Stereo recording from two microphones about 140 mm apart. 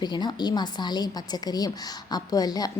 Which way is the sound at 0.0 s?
30° left (ahead or behind).